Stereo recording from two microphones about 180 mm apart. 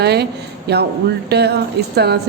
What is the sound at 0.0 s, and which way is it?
A woman's voice, 65° right (ahead or behind).